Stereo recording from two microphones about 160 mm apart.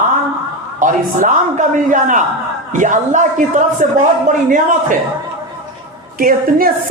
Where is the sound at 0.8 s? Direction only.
55° right (ahead or behind).